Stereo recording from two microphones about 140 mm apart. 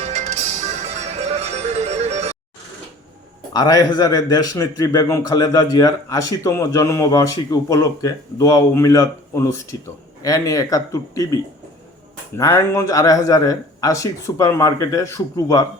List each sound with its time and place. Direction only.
0.0 s music: 55° right (ahead or behind)
3.5 s a man's voice: 30° left (ahead or behind)
12.4 s a man's voice: 20° left (ahead or behind)